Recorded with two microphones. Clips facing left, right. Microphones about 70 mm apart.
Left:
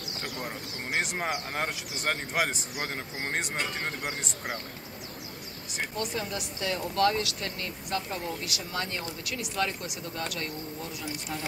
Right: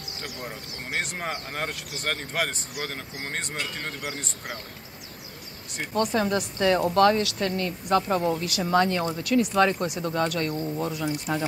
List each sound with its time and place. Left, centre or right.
0.9 s speech: centre
5.9 s speech: right
8.6 s speech: right